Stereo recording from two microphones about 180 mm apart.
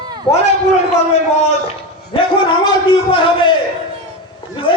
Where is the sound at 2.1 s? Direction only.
25° left (ahead or behind).